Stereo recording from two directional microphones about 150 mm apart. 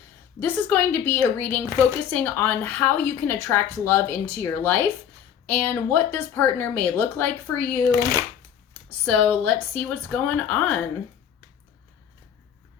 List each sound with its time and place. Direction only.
0.3 s speech: 10° left (ahead or behind)
7.9 s speech: 30° right (ahead or behind)
8.9 s speech: 15° left (ahead or behind)